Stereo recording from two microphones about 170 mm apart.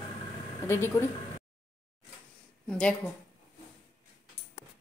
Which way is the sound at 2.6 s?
5° left (ahead or behind).